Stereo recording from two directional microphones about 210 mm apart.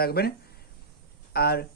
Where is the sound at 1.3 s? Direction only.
45° left (ahead or behind).